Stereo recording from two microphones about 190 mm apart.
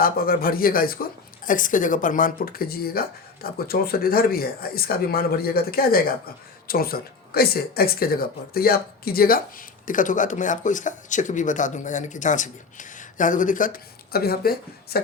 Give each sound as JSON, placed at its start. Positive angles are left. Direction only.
{"t": 0.0, "sound": "speech", "side_deg": 50}